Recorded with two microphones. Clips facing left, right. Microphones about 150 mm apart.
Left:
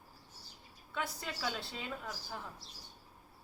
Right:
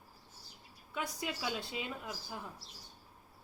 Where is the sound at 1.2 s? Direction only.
10° right (ahead or behind).